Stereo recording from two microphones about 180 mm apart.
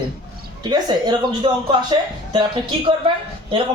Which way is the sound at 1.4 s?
30° right (ahead or behind).